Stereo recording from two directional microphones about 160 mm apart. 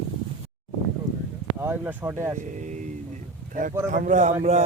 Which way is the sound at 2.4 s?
50° right (ahead or behind).